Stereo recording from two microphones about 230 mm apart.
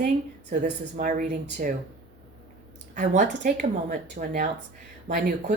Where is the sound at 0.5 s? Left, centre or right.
Right.